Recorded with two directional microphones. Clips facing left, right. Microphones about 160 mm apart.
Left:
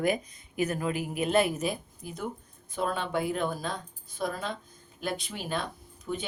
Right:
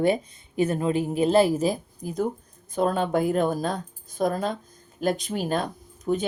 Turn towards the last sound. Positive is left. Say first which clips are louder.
# right 9 dB
turn(degrees=-40)  # may be behind; listen again after turning